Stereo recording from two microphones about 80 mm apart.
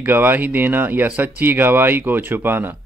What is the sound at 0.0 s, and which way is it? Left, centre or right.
A man's voice, right.